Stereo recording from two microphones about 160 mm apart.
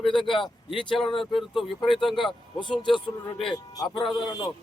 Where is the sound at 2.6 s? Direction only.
30° left (ahead or behind).